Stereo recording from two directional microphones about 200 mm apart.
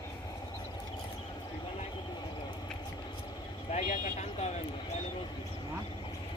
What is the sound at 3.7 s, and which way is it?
Speech, 35° left (ahead or behind).